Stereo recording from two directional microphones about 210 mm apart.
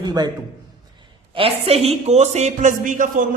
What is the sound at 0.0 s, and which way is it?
A man's voice, 20° right (ahead or behind).